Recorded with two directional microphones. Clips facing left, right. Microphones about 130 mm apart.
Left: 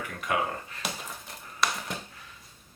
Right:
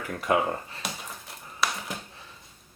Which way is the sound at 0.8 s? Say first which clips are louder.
Even; centre (ahead or behind).